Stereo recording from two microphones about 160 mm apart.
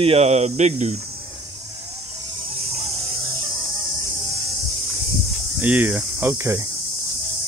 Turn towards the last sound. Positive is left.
turn(degrees=-15)  # may be behind; listen again after turning